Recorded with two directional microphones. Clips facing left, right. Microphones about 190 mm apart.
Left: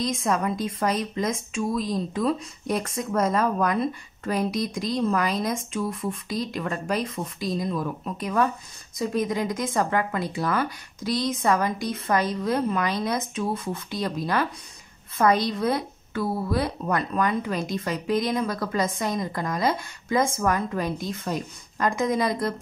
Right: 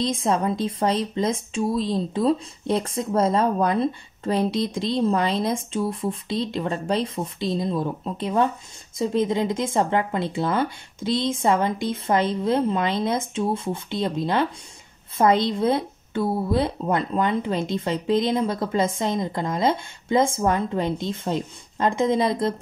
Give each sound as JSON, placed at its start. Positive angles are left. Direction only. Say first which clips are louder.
{"t": 0.0, "sound": "speech", "louder": "right 2 dB", "side_deg": -30}